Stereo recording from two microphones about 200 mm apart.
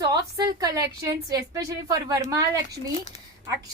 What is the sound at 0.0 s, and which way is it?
A woman's voice, 20° right (ahead or behind).